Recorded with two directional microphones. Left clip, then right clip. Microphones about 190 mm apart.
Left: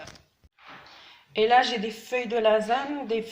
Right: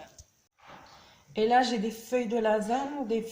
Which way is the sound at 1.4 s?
Centre (ahead or behind).